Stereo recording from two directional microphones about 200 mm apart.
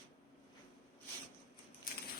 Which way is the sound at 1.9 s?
45° left (ahead or behind).